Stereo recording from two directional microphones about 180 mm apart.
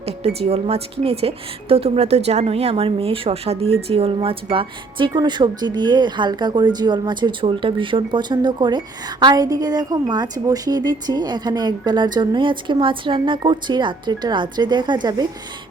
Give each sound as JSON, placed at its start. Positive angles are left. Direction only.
{"t": 0.2, "sound": "a woman's voice", "side_deg": -35}